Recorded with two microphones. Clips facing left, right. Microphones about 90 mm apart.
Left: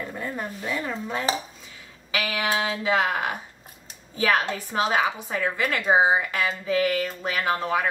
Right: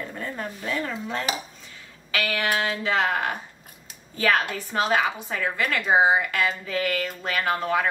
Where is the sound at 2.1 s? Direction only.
15° left (ahead or behind).